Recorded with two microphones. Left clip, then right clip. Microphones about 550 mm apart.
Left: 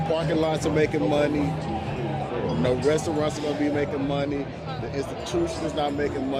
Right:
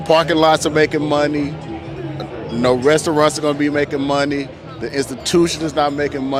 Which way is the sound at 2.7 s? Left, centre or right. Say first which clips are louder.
Right 10 dB; right.